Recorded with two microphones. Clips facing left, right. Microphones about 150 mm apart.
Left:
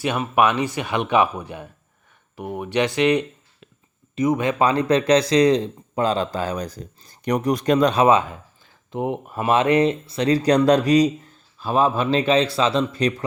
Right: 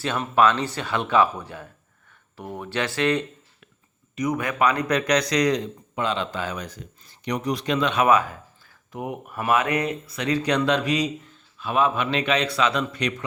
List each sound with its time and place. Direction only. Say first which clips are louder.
0.0 s speech: left 1 dB; 15° left (ahead or behind); by 8.0 s 40° left (ahead or behind)
8.0 s speech: left 3 dB; 25° left (ahead or behind)